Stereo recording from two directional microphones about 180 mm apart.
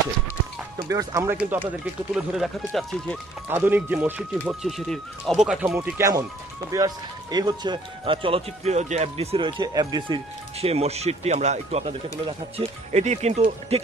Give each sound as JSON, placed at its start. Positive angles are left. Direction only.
{"t": 0.7, "sound": "speech", "side_deg": -20}
{"t": 3.4, "sound": "speech", "side_deg": -10}
{"t": 5.8, "sound": "speech", "side_deg": -15}